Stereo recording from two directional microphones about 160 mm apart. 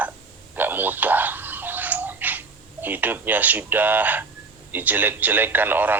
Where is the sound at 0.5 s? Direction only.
10° right (ahead or behind).